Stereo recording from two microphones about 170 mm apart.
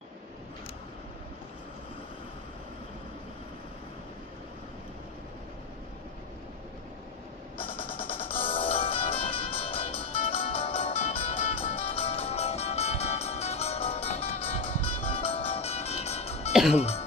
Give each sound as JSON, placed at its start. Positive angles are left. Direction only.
{"t": 7.9, "sound": "music", "side_deg": 30}
{"t": 16.7, "sound": "speech", "side_deg": 35}